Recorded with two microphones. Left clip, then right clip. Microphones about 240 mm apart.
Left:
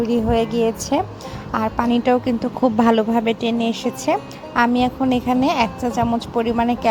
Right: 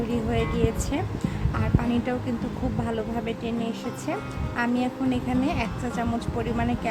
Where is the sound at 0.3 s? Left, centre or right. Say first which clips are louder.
Left 6 dB; left.